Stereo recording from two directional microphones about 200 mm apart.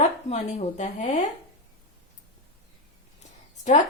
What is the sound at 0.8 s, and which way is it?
Speech, 35° left (ahead or behind).